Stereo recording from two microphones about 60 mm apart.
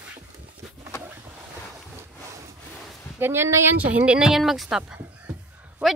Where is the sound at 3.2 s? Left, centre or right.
Right.